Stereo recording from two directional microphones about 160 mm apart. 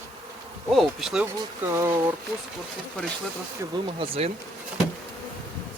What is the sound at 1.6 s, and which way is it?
Speech, 15° right (ahead or behind).